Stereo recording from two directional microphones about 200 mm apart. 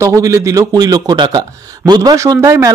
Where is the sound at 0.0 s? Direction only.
15° right (ahead or behind).